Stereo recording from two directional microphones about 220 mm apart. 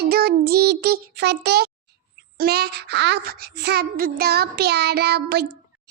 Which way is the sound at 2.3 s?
45° right (ahead or behind).